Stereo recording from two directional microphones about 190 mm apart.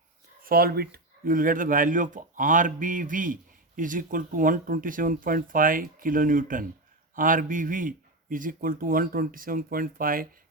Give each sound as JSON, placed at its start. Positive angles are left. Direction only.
{"t": 0.4, "sound": "speech", "side_deg": -50}